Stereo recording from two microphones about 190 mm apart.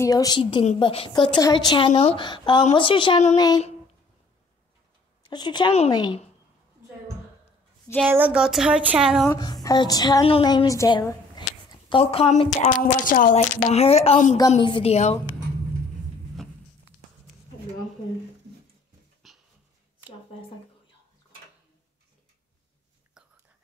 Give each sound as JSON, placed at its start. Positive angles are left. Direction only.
{"t": 0.0, "sound": "a woman's voice", "side_deg": 20}
{"t": 3.3, "sound": "a woman's voice", "side_deg": 20}
{"t": 5.3, "sound": "a woman's voice", "side_deg": 20}
{"t": 8.1, "sound": "speech", "side_deg": -5}
{"t": 9.3, "sound": "a woman's voice", "side_deg": 20}
{"t": 12.5, "sound": "a woman's voice", "side_deg": 40}
{"t": 13.7, "sound": "a woman's voice", "side_deg": 35}
{"t": 19.2, "sound": "a sound", "side_deg": 0}
{"t": 23.2, "sound": "whispering", "side_deg": -5}